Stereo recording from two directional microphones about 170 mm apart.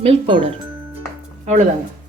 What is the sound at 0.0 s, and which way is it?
Speech, 35° right (ahead or behind).